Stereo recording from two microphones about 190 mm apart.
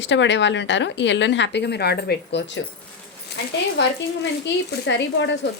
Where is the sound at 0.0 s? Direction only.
70° left (ahead or behind).